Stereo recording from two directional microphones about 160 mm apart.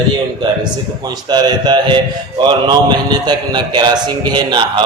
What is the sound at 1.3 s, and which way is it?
A man's voice, 25° right (ahead or behind).